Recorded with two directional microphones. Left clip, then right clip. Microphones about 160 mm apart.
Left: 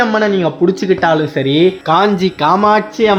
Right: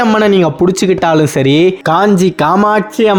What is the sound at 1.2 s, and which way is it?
A man's voice, 50° right (ahead or behind).